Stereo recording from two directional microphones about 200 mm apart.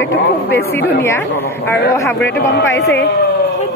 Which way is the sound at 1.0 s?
10° left (ahead or behind).